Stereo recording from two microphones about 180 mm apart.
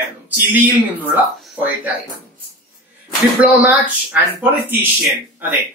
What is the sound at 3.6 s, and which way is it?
Speech, 10° right (ahead or behind).